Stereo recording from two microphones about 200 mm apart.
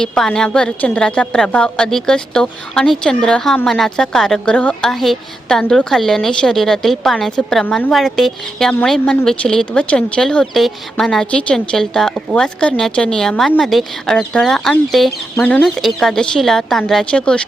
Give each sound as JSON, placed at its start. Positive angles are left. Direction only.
{"t": 0.0, "sound": "a woman's voice", "side_deg": 5}